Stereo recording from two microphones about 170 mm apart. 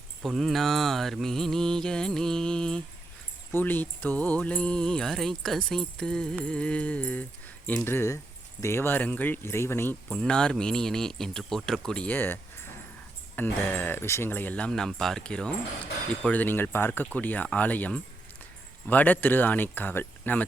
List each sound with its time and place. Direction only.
0.2 s mantra: centre (ahead or behind)
3.5 s speech: 10° left (ahead or behind)